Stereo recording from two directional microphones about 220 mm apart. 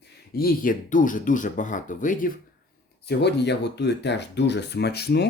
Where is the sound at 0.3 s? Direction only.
40° left (ahead or behind).